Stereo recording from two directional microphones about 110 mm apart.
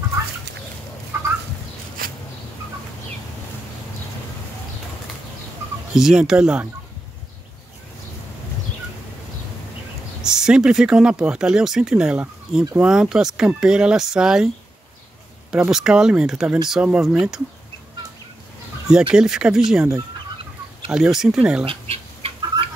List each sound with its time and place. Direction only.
5.9 s speech: 5° right (ahead or behind)
10.2 s speech: 5° right (ahead or behind)
15.7 s speech: 5° right (ahead or behind)
18.9 s speech: 5° right (ahead or behind)
20.9 s speech: 5° right (ahead or behind)
21.6 s chicken: 60° right (ahead or behind)